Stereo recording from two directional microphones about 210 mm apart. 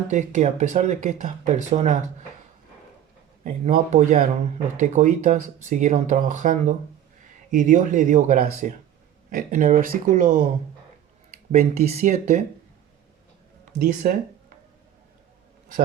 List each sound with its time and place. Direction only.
0.1 s speech: 35° right (ahead or behind)
3.4 s speech: 35° right (ahead or behind)
11.8 s speech: 30° right (ahead or behind)
14.0 s speech: 45° right (ahead or behind)